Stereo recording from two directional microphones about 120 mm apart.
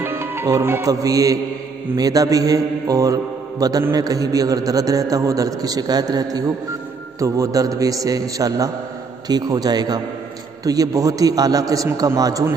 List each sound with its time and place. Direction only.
0.0 s music: 15° right (ahead or behind)
2.0 s a man's voice: 30° right (ahead or behind)